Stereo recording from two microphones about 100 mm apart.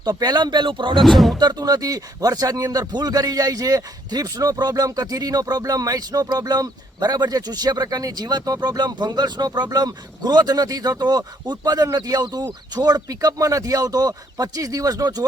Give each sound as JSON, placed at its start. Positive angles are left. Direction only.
{"t": 0.0, "sound": "speech", "side_deg": -45}
{"t": 1.0, "sound": "speech", "side_deg": 0}
{"t": 1.4, "sound": "speech", "side_deg": -45}